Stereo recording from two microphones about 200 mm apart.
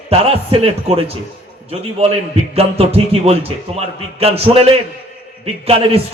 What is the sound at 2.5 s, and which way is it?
A man's voice, 30° right (ahead or behind).